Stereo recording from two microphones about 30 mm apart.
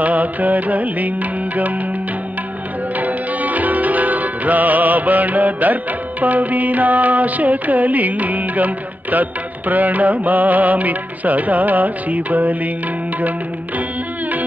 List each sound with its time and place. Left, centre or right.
0.0 s music: right
3.0 s music: right